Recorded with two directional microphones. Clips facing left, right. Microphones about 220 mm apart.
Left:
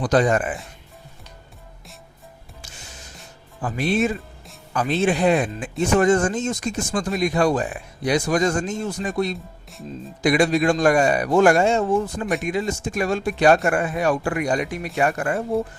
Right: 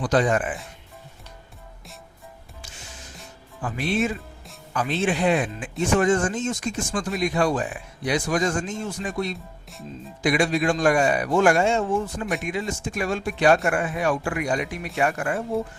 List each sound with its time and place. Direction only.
0.0 s speech: 40° left (ahead or behind)
3.6 s speech: 40° left (ahead or behind)